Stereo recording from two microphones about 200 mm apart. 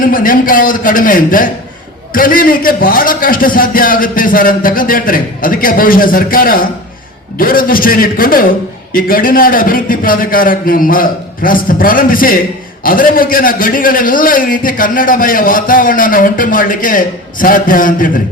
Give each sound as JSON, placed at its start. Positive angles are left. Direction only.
{"t": 0.0, "sound": "a man's voice", "side_deg": 45}